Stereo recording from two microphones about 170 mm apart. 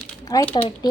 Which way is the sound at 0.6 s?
30° left (ahead or behind).